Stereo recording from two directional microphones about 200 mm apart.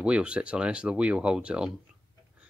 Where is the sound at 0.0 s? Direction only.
5° right (ahead or behind).